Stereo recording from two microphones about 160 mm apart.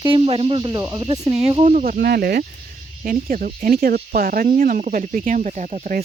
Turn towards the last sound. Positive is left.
turn(degrees=-50)  # may be behind; listen again after turning